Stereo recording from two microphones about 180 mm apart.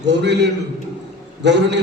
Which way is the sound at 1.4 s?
75° right (ahead or behind).